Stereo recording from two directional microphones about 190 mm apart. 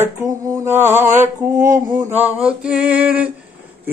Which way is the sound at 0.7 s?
40° right (ahead or behind).